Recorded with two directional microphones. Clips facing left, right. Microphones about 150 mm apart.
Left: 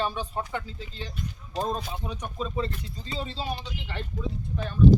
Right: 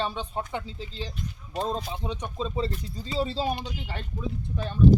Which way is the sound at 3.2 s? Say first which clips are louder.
Right 6 dB; 40° right (ahead or behind).